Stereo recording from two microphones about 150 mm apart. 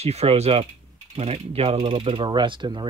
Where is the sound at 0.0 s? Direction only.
45° right (ahead or behind).